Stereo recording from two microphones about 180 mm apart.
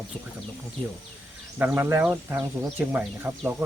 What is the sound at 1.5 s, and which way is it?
Speech, 10° right (ahead or behind).